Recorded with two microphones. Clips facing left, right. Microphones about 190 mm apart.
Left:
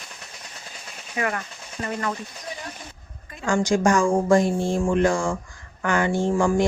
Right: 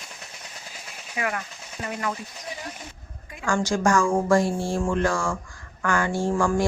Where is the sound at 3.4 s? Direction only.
20° left (ahead or behind).